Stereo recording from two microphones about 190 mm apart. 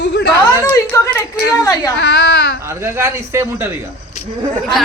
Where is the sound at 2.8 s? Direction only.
15° right (ahead or behind).